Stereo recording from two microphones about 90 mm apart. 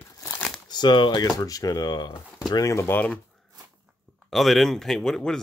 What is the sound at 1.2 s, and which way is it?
A man's voice, 40° left (ahead or behind).